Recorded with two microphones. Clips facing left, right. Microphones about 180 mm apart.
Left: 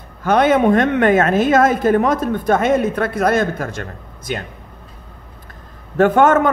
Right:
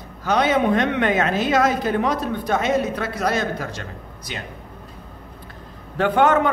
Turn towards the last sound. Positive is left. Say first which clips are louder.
# left 4 dB
turn(degrees=45)  # may be behind; listen again after turning